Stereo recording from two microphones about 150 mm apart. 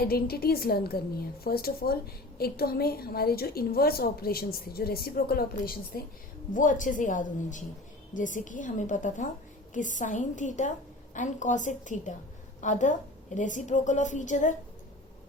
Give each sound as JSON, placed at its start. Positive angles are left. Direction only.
{"t": 0.0, "sound": "a woman's voice", "side_deg": 90}
{"t": 6.5, "sound": "a woman's voice", "side_deg": 60}